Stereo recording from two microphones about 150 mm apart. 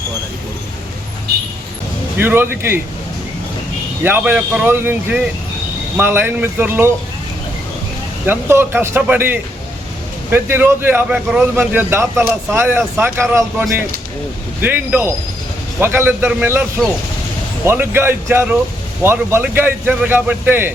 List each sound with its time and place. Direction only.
2.1 s speech: 15° right (ahead or behind)
4.0 s speech: 10° right (ahead or behind)
8.3 s speech: 15° right (ahead or behind)